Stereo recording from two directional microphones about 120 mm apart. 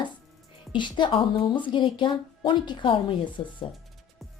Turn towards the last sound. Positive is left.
turn(degrees=40)  # may be behind; listen again after turning